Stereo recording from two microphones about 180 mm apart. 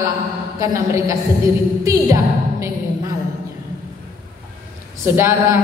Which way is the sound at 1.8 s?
15° right (ahead or behind).